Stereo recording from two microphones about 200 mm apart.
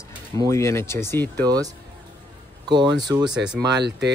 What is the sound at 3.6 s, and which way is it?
Speech, 60° right (ahead or behind).